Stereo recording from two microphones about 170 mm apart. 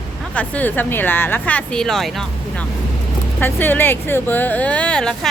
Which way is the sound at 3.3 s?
10° left (ahead or behind).